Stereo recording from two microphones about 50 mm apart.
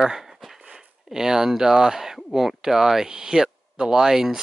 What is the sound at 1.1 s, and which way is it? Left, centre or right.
Speech, centre.